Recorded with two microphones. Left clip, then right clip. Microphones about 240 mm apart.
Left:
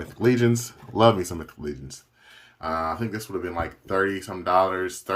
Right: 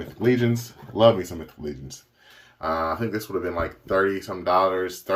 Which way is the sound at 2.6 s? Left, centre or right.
Centre.